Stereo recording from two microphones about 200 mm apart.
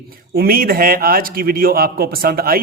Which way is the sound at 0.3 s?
45° right (ahead or behind).